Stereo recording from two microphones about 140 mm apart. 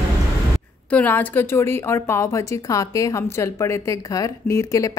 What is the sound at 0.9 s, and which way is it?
A woman's voice, 10° left (ahead or behind).